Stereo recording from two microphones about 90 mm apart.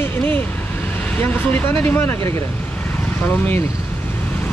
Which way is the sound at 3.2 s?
20° left (ahead or behind).